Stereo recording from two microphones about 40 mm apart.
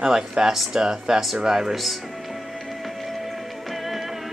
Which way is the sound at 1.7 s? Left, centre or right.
Centre.